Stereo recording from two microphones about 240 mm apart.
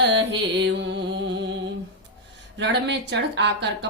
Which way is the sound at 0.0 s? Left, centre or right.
Right.